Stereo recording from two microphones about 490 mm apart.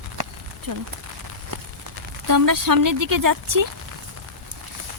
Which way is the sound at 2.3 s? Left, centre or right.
Right.